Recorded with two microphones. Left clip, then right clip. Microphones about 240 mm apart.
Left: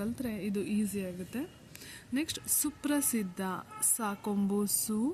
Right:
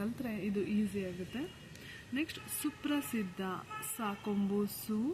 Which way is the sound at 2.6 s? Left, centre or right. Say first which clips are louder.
Left 2 dB; left.